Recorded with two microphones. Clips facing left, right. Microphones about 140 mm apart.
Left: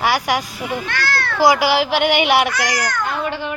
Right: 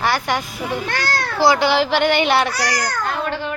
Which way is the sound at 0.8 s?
45° right (ahead or behind).